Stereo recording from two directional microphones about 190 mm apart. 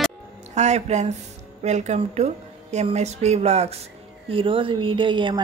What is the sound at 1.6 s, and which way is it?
A woman's voice, 35° right (ahead or behind).